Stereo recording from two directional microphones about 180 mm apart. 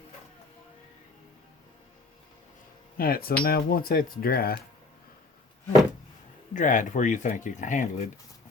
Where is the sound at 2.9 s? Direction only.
55° left (ahead or behind).